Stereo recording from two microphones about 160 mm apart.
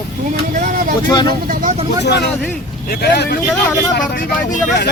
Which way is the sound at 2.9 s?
80° left.